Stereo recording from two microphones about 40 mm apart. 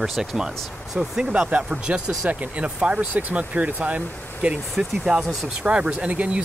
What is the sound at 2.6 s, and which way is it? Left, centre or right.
Speech, right.